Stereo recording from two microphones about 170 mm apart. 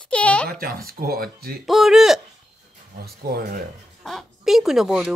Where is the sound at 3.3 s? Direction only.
65° right (ahead or behind).